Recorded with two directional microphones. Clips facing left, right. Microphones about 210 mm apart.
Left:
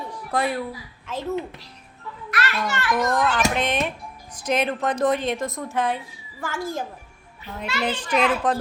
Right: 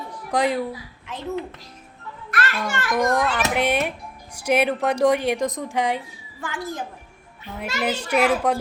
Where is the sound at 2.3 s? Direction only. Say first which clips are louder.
Even; 50° right (ahead or behind).